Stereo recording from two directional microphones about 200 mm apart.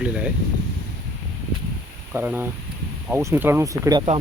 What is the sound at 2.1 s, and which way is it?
Speech, 10° right (ahead or behind).